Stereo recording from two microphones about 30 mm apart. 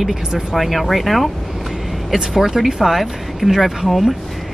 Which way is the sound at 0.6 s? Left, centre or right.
Centre.